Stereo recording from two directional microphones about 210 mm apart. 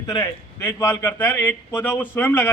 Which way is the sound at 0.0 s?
20° left (ahead or behind).